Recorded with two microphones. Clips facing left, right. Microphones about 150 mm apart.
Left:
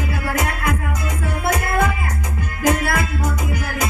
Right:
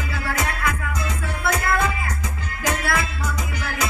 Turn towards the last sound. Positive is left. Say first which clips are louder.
# left 5 dB
turn(degrees=50)  # may be behind; listen again after turning